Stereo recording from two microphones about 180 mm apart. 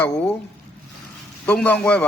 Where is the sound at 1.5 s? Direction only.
10° left (ahead or behind).